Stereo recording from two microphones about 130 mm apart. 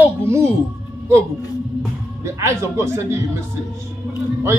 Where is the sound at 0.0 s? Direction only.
20° right (ahead or behind).